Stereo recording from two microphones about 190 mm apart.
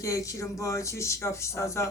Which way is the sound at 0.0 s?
15° left (ahead or behind).